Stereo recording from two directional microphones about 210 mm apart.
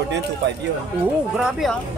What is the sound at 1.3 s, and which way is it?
Speech, centre (ahead or behind).